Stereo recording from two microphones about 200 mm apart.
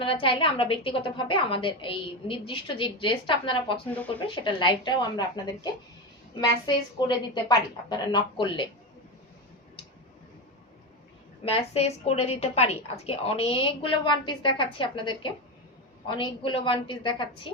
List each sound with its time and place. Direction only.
0.0 s a woman's voice: 25° left (ahead or behind)
3.8 s speech: 5° left (ahead or behind)
4.4 s a woman's voice: 20° left (ahead or behind)
6.7 s a woman's voice: 20° left (ahead or behind)
11.4 s a woman's voice: 30° left (ahead or behind)